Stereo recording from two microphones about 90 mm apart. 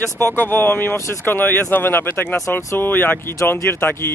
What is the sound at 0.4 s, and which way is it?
Speech, 20° left (ahead or behind).